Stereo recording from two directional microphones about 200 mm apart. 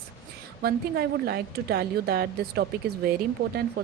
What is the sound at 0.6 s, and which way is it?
A woman's voice, 50° right (ahead or behind).